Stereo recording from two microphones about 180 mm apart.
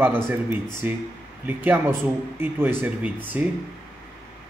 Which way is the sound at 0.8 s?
10° right (ahead or behind).